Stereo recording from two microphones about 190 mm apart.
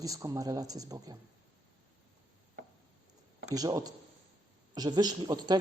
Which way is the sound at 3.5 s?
20° right (ahead or behind).